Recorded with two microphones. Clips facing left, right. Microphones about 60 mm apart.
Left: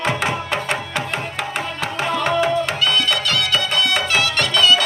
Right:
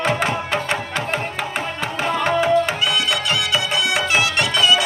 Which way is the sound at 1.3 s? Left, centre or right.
Centre.